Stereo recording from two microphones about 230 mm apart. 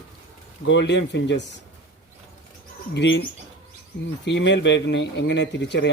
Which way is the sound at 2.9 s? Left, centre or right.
Left.